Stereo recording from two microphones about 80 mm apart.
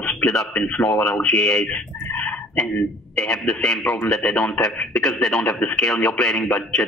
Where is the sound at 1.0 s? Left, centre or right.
Centre.